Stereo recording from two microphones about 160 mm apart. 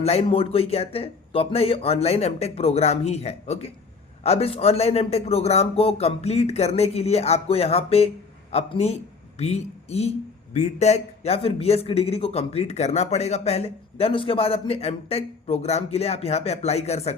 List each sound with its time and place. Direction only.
0.0 s speech: 40° left (ahead or behind)